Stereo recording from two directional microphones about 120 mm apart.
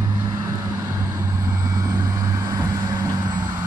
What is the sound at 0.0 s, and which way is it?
Vehicle, 35° right (ahead or behind).